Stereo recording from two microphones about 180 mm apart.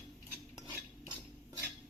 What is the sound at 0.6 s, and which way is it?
Stir, 25° right (ahead or behind).